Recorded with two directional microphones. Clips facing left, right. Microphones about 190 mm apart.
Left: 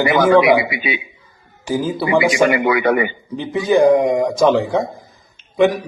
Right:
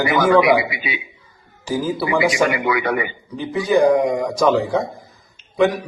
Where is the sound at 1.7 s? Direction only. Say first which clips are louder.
Left 2 dB; 20° left (ahead or behind).